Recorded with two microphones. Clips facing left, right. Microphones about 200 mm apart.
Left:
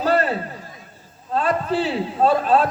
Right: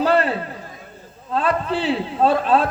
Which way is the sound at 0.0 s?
40° left (ahead or behind).